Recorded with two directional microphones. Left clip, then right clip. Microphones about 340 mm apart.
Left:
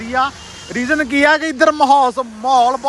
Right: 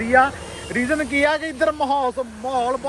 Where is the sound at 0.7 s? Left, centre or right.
Left.